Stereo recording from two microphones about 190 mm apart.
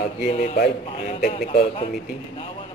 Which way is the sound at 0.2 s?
45° left (ahead or behind).